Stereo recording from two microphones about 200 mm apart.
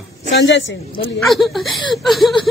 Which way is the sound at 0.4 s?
65° left (ahead or behind).